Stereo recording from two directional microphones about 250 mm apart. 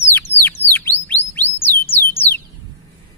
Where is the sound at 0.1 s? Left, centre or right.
Centre.